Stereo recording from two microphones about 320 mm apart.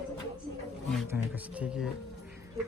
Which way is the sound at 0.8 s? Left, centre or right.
Centre.